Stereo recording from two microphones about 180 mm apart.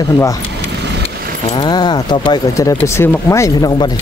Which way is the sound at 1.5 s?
25° left (ahead or behind).